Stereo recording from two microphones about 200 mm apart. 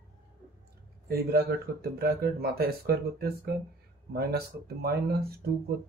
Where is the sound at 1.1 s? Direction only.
50° right (ahead or behind).